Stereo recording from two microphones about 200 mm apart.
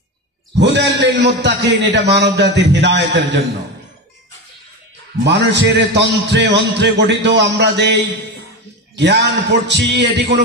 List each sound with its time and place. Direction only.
0.6 s a man's voice: 60° right (ahead or behind)
5.2 s a man's voice: 60° right (ahead or behind)